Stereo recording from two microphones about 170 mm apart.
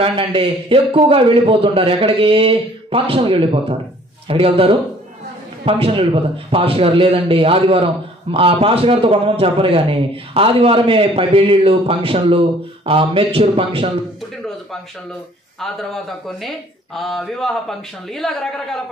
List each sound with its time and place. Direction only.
0.0 s a man's voice: 30° right (ahead or behind)
15.6 s speech: centre (ahead or behind)